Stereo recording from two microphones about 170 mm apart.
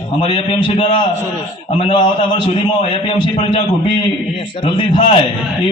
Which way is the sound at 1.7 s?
35° left (ahead or behind).